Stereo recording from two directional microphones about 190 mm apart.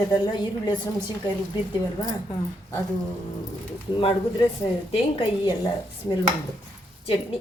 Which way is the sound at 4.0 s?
30° left (ahead or behind).